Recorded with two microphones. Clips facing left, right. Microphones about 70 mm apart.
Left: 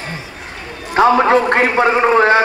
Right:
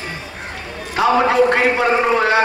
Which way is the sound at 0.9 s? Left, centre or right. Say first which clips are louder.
Left 4 dB; left.